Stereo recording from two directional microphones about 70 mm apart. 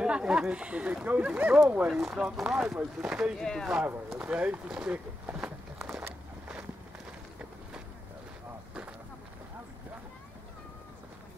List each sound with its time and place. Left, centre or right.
0.0 s speech: centre
1.9 s speech: centre
3.3 s speech: centre
3.8 s speech: right
4.2 s speech: centre
5.2 s a sound: centre